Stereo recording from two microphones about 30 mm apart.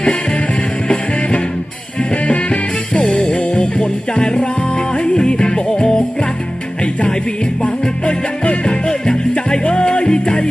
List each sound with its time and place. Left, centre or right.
0.9 s music: left
7.6 s music: left